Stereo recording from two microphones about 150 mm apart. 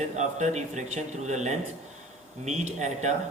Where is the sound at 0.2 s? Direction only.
50° right (ahead or behind).